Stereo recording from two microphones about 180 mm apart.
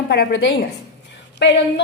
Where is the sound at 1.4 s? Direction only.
80° left.